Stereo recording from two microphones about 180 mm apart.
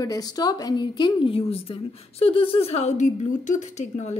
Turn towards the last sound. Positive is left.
turn(degrees=40)  # may be behind; listen again after turning